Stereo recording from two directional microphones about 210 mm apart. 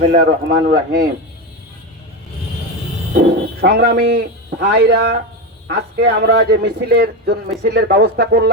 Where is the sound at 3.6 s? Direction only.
45° right (ahead or behind).